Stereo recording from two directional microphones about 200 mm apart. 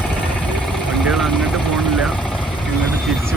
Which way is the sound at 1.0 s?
Centre (ahead or behind).